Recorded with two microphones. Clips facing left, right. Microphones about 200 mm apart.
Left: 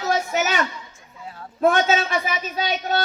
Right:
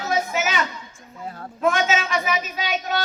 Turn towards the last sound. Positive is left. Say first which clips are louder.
# left 2 dB
turn(degrees=35)  # may be behind; listen again after turning